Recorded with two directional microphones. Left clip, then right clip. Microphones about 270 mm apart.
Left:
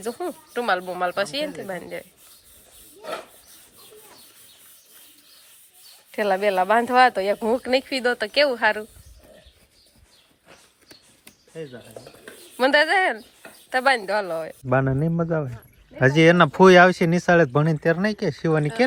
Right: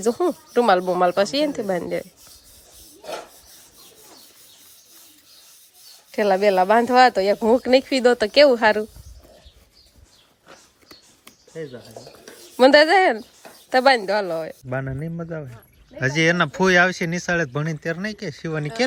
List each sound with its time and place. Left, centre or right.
0.0 s speech: centre
6.1 s speech: centre
12.5 s speech: centre
14.8 s speech: centre